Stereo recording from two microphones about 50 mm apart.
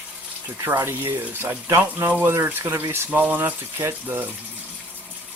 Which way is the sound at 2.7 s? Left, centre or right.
Right.